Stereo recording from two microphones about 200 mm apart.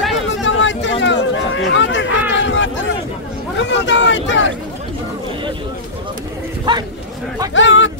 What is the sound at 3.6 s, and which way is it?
Speech, 65° left (ahead or behind).